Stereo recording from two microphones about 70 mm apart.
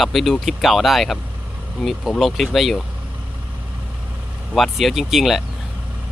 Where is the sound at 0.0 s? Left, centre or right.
Centre.